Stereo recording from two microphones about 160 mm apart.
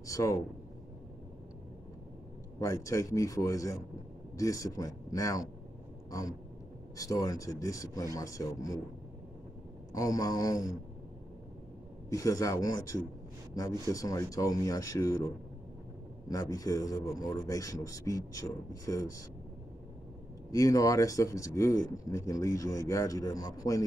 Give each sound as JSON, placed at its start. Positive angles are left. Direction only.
{"t": 0.0, "sound": "speech", "side_deg": 20}
{"t": 2.6, "sound": "speech", "side_deg": 20}
{"t": 7.0, "sound": "speech", "side_deg": 20}
{"t": 9.9, "sound": "speech", "side_deg": 20}
{"t": 12.1, "sound": "speech", "side_deg": 20}
{"t": 16.3, "sound": "speech", "side_deg": 20}
{"t": 20.5, "sound": "speech", "side_deg": 20}